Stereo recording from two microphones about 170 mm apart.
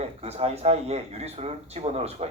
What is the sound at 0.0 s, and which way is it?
A man's voice, 40° right (ahead or behind).